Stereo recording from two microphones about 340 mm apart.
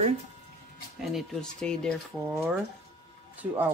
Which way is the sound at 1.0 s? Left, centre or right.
Centre.